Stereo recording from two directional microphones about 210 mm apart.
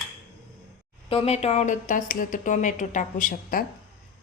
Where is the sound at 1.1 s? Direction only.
30° left (ahead or behind).